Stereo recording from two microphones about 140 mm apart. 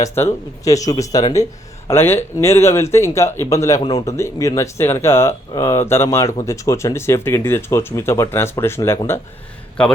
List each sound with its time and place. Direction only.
0.0 s speech: 20° left (ahead or behind)
3.8 s a man's voice: 35° left (ahead or behind)
4.0 s a man's voice: 20° left (ahead or behind)